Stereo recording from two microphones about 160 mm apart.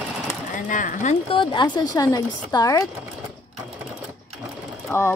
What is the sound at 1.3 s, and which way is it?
A woman's voice, 30° left (ahead or behind).